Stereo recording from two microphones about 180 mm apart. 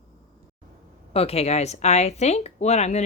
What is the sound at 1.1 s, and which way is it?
Speech, 35° left (ahead or behind).